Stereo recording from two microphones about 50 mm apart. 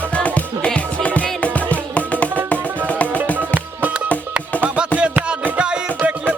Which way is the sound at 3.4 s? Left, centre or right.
Right.